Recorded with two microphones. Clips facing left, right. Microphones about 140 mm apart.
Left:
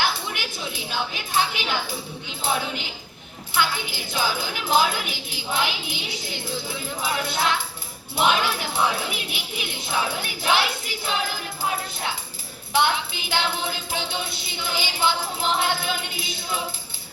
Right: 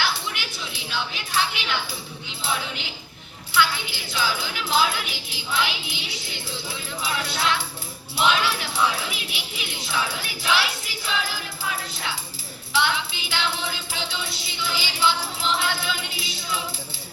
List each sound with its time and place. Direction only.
0.0 s a sound: 45° left (ahead or behind)
2.4 s music: 45° left (ahead or behind)
12.7 s music: 50° left (ahead or behind)